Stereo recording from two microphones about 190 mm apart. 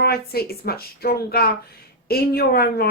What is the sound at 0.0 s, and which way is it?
Speech, 55° left (ahead or behind).